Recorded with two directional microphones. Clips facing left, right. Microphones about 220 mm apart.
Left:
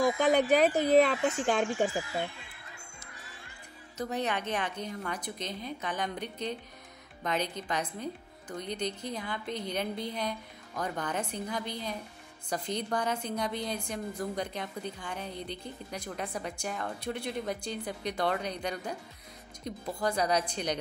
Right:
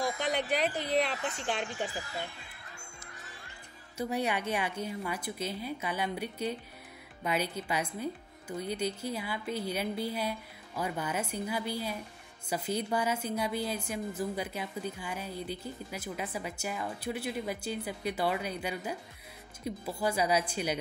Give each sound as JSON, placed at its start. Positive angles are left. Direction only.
{"t": 0.0, "sound": "speech", "side_deg": 45}
{"t": 4.0, "sound": "a woman's voice", "side_deg": -10}